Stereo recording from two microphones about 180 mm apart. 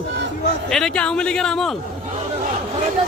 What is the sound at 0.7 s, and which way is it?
A man's voice, 5° left (ahead or behind).